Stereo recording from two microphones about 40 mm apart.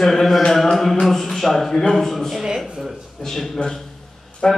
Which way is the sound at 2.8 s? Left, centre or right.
Centre.